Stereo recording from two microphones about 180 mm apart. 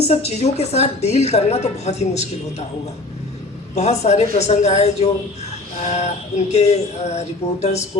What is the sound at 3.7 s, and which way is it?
A woman's voice, 40° left (ahead or behind).